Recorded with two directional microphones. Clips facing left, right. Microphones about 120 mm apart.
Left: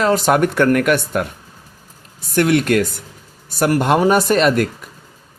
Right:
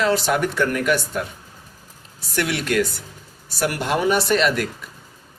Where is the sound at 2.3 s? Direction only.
50° left (ahead or behind).